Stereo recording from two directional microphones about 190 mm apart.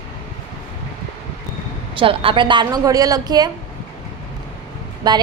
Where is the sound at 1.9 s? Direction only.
30° right (ahead or behind).